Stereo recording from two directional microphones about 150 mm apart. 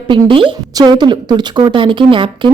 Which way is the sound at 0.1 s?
35° right (ahead or behind).